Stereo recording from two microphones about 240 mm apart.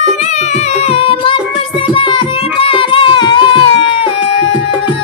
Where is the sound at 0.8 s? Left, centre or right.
Left.